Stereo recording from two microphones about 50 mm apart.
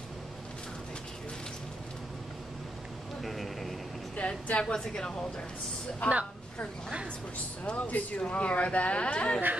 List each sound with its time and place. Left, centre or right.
3.2 s a sound: centre
4.2 s a woman's voice: left
7.6 s speech: left